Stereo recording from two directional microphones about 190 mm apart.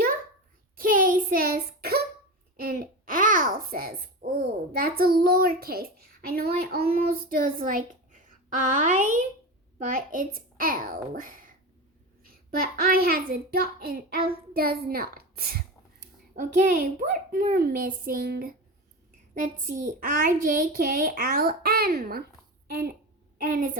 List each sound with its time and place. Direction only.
0.8 s child singing: 45° right (ahead or behind)
2.6 s babbling: 50° right (ahead or behind)
9.8 s a woman's voice: 45° right (ahead or behind)
22.6 s a sound: 55° right (ahead or behind)